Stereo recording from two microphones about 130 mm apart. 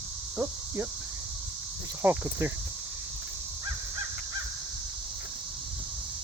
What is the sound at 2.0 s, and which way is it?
Speech, 15° right (ahead or behind).